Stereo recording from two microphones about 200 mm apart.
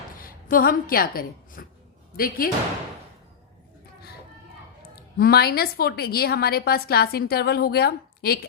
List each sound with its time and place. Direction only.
0.2 s a woman's voice: 45° left (ahead or behind)
5.1 s a woman's voice: 50° left (ahead or behind)